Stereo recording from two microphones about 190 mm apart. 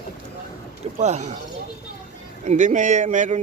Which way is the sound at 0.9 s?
35° right (ahead or behind).